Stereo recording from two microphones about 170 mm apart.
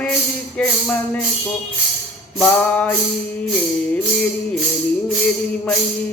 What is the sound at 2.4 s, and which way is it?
Music, 10° left (ahead or behind).